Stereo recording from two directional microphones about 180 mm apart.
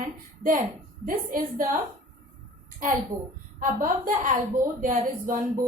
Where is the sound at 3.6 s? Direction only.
50° right (ahead or behind).